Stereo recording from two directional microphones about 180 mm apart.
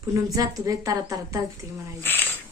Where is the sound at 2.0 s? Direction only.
10° left (ahead or behind).